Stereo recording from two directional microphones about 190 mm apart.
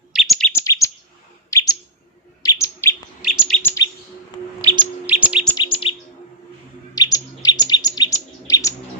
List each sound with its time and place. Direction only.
0.1 s chirp: centre (ahead or behind)
0.5 s chirp: 15° left (ahead or behind)
1.5 s bird: 15° left (ahead or behind)
3.6 s chirp: 10° left (ahead or behind)
4.6 s bird: 25° right (ahead or behind)
5.0 s chirp: 10° right (ahead or behind)
5.5 s chirp: 25° left (ahead or behind)
6.9 s bird: 20° left (ahead or behind)